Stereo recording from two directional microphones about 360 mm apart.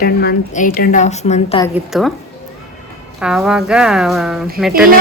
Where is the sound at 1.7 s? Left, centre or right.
Centre.